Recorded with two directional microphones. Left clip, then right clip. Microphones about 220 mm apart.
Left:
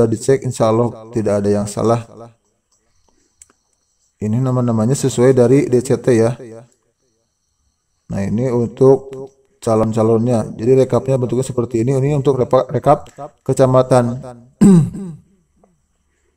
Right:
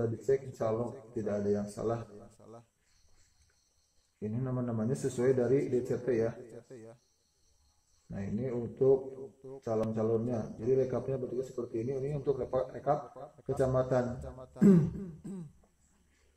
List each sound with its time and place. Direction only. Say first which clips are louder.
0.0 s speech: left 17 dB; 50° left (ahead or behind)
4.2 s speech: left 18 dB; 50° left (ahead or behind)
8.1 s speech: left 18 dB; 55° left (ahead or behind)